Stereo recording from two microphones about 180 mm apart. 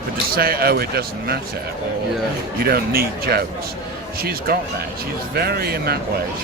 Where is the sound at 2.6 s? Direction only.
60° right (ahead or behind).